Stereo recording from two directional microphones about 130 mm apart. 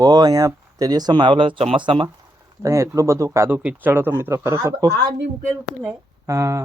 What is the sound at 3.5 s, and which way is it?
Speech, 10° right (ahead or behind).